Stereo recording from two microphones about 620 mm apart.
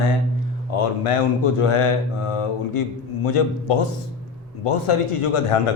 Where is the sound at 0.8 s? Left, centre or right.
Left.